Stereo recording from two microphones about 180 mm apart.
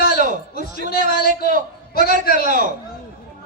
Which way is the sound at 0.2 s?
45° right (ahead or behind).